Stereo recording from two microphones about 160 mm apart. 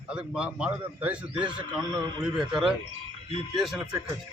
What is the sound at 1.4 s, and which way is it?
Speech, 25° right (ahead or behind).